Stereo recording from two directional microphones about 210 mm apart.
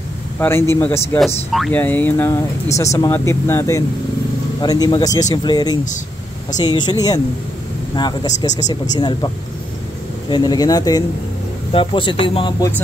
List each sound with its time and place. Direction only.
0.4 s speech: 10° left (ahead or behind)
1.1 s speech: centre (ahead or behind); by 9.3 s 20° left (ahead or behind)
10.3 s speech: 20° left (ahead or behind)